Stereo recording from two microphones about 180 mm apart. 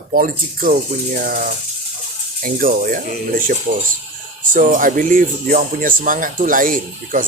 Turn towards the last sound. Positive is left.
turn(degrees=-50)  # may be behind; listen again after turning